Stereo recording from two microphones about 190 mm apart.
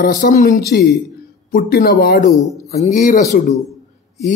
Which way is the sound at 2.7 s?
35° left (ahead or behind).